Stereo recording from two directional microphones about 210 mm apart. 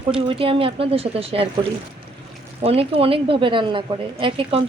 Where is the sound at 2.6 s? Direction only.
30° right (ahead or behind).